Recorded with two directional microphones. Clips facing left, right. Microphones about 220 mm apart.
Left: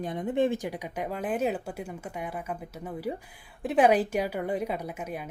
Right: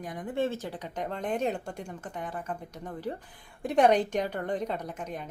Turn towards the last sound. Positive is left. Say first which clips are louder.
# left 2 dB
turn(degrees=10)  # may be behind; listen again after turning